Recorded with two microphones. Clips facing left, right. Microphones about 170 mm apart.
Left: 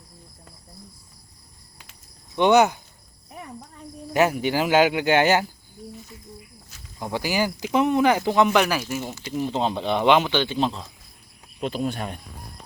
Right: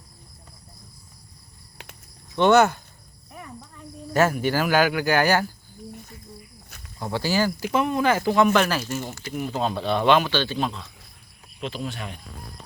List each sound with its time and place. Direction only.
2.3 s speech: 15° left (ahead or behind)
4.1 s speech: 15° left (ahead or behind)
7.0 s speech: 15° left (ahead or behind)
9.3 s speech: 25° left (ahead or behind)
10.7 s speech: 35° left (ahead or behind)
11.6 s speech: 45° left (ahead or behind)